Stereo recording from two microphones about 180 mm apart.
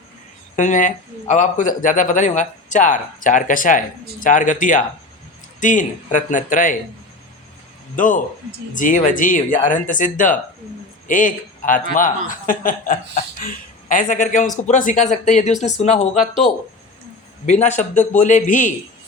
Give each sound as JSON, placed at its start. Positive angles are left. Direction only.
{"t": 0.5, "sound": "speech", "side_deg": 45}
{"t": 7.9, "sound": "speech", "side_deg": 45}
{"t": 17.4, "sound": "speech", "side_deg": 40}